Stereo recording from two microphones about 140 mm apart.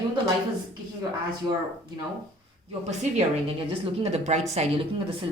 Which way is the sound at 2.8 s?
50° right (ahead or behind).